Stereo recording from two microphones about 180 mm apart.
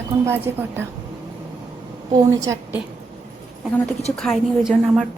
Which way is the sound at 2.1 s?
20° right (ahead or behind).